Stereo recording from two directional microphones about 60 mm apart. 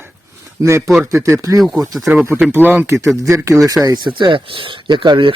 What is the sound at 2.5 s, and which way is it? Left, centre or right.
Speech, right.